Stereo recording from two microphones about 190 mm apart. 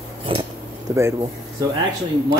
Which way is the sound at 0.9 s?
15° right (ahead or behind).